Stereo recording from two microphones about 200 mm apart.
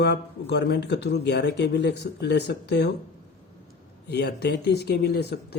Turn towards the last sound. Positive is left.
turn(degrees=55)  # may be behind; listen again after turning